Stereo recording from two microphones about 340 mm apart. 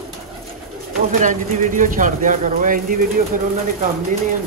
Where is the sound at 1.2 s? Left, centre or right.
Right.